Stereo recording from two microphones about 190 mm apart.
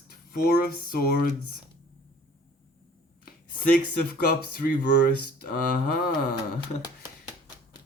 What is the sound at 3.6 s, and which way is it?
Speech, 50° left (ahead or behind).